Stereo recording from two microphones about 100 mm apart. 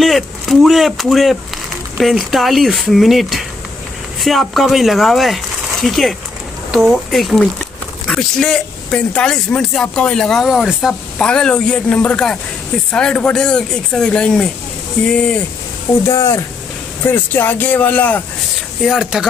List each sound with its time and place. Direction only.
0.0 s speech: centre (ahead or behind)
16.1 s speech: 30° left (ahead or behind)
18.9 s speech: 5° right (ahead or behind)